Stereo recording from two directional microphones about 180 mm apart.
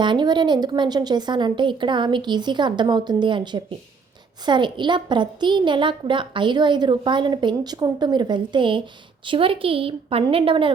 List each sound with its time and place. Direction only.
0.0 s a woman's voice: 25° right (ahead or behind)